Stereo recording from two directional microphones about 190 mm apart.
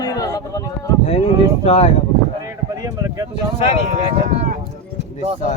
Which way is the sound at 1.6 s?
30° left (ahead or behind).